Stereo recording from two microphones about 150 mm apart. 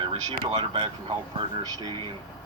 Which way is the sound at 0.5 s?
35° right (ahead or behind).